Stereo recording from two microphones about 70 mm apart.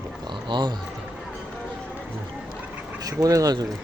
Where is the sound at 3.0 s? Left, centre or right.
Right.